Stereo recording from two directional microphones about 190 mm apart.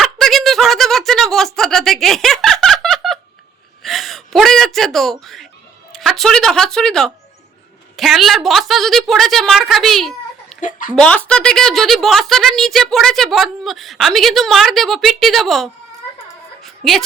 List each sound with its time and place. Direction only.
0.0 s snicker: centre (ahead or behind)
3.8 s gasp: centre (ahead or behind)
5.2 s a woman's voice: centre (ahead or behind)
10.6 s speech: 45° left (ahead or behind)
10.9 s a woman's voice: 5° left (ahead or behind)
16.6 s a sound: centre (ahead or behind)